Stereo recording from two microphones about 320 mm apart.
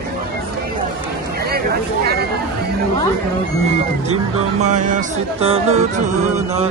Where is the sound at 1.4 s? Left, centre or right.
Right.